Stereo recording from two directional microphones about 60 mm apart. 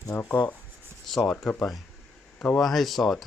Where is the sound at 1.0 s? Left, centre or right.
Centre.